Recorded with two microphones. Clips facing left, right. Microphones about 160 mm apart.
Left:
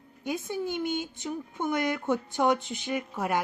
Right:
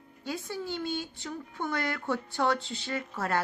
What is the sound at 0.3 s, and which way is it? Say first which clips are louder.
A woman's voice: left 4 dB; 20° left (ahead or behind).